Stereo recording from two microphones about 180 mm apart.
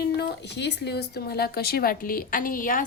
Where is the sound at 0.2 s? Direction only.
70° left (ahead or behind).